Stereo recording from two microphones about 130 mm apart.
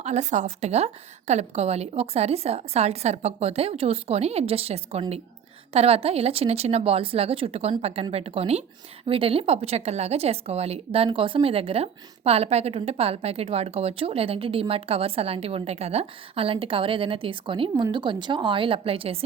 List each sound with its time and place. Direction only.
0.0 s a woman's voice: 60° right (ahead or behind)